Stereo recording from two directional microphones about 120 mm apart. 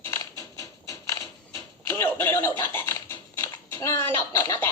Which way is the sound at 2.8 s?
25° left (ahead or behind).